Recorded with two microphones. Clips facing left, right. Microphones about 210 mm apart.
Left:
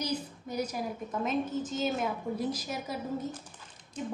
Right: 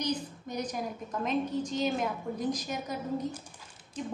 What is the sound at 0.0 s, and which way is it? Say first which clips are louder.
A woman's voice: right 1 dB; 10° left (ahead or behind).